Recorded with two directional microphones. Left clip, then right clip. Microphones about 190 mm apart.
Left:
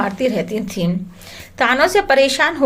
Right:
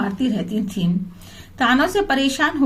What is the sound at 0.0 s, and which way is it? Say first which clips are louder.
A woman's voice: left 6 dB; 20° left (ahead or behind).